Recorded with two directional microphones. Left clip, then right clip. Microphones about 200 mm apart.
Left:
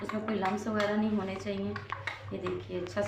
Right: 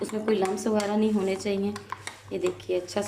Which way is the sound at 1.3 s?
50° right (ahead or behind).